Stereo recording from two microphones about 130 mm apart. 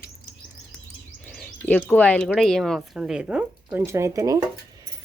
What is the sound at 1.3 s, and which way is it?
Speech, 10° left (ahead or behind).